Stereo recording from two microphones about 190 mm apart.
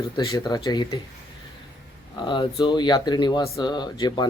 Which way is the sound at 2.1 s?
25° left (ahead or behind).